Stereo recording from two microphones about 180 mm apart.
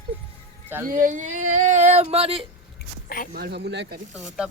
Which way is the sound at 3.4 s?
65° right (ahead or behind).